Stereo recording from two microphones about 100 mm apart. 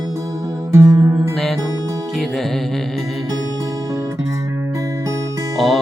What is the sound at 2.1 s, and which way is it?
Music, centre (ahead or behind).